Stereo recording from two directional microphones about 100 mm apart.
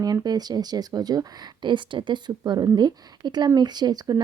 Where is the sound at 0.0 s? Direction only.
40° right (ahead or behind).